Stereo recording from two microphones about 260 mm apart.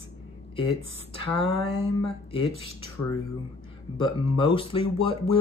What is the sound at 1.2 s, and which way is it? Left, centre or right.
Speech, left.